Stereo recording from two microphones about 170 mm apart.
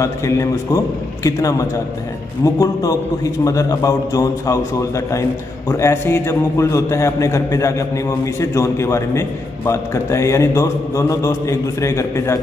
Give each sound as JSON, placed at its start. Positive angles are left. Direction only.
{"t": 0.0, "sound": "a man's voice", "side_deg": 20}